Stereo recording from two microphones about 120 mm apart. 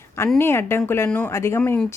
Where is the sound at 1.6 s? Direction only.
10° left (ahead or behind).